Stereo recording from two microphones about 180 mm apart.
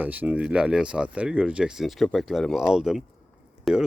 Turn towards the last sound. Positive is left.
turn(degrees=0)  # may be behind; listen again after turning